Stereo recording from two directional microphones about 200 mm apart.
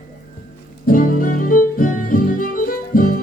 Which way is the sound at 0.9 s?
45° left (ahead or behind).